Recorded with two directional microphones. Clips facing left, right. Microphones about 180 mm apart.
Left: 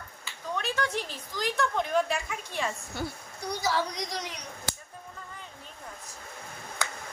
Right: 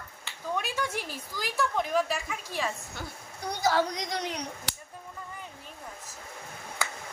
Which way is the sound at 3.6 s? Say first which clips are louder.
Right 4 dB; 55° right (ahead or behind).